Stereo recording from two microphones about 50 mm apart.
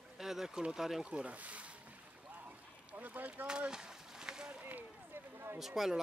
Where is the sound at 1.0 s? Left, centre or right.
Right.